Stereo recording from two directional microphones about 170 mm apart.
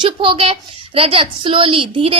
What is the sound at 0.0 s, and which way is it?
A woman's voice, 30° right (ahead or behind).